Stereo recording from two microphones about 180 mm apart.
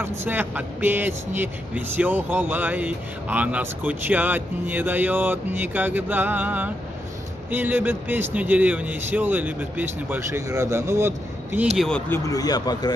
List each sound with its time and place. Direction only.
0.0 s speech: 10° right (ahead or behind)
11.7 s speech: centre (ahead or behind)
12.1 s speech: 20° left (ahead or behind)